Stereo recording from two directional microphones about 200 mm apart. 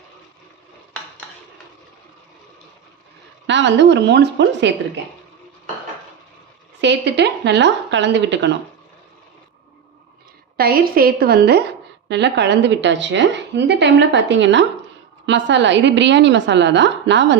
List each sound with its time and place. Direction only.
3.4 s a woman's voice: 65° right (ahead or behind)
6.8 s a woman's voice: 60° right (ahead or behind)
10.6 s a woman's voice: 50° right (ahead or behind)